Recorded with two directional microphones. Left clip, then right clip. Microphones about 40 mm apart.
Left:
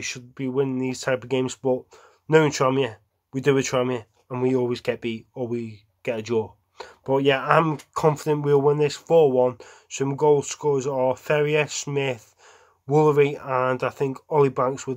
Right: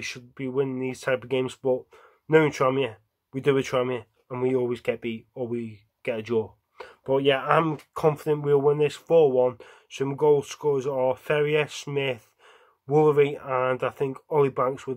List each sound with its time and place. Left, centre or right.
0.4 s speech: centre
2.2 s speech: left
5.4 s speech: left
6.0 s speech: centre
7.1 s speech: left
8.7 s speech: left
12.8 s speech: left